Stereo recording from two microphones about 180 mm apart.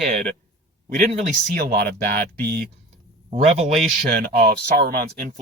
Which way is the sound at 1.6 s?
60° right (ahead or behind).